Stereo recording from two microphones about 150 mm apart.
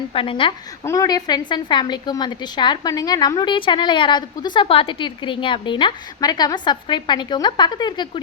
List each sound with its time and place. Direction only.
0.1 s a woman's voice: 35° left (ahead or behind)
0.9 s a woman's voice: 25° left (ahead or behind)